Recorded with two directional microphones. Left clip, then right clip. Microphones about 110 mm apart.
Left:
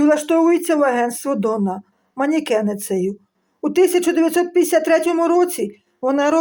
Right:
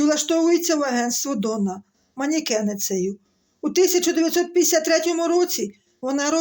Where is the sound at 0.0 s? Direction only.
50° right (ahead or behind).